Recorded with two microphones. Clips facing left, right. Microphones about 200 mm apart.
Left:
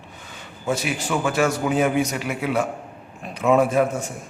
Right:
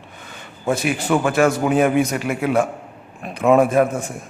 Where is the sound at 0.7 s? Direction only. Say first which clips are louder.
Right 5 dB; 55° right (ahead or behind).